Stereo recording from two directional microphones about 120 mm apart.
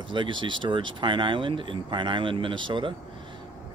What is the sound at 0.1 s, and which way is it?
Speech, 40° right (ahead or behind).